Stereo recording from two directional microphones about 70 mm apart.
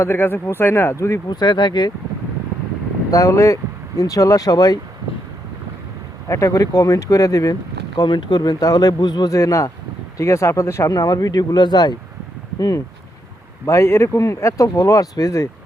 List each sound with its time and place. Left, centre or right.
0.0 s speech: left
0.9 s speech: left
1.3 s speech: left
3.1 s speech: left
6.2 s speech: left
7.9 s speech: left
9.3 s speech: left
12.5 s speech: left
13.7 s speech: left